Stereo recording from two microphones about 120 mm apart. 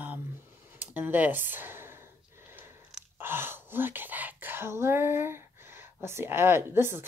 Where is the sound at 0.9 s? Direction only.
15° right (ahead or behind).